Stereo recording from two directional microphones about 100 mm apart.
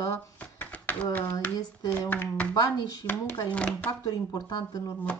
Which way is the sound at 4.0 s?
40° left (ahead or behind).